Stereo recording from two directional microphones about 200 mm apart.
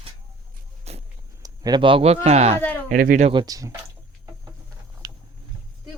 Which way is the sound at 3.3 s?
20° right (ahead or behind).